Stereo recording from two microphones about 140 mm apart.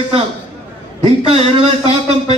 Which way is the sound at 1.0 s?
45° right (ahead or behind).